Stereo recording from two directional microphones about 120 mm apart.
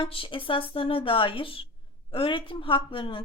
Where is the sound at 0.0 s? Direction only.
45° left (ahead or behind).